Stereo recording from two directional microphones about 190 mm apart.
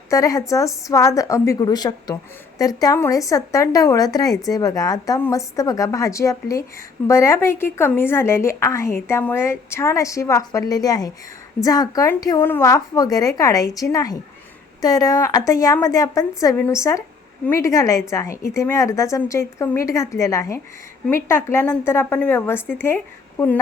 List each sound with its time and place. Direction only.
0.1 s a woman's voice: 15° left (ahead or behind)